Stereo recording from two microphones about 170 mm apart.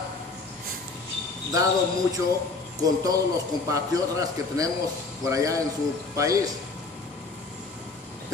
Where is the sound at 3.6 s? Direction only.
20° right (ahead or behind).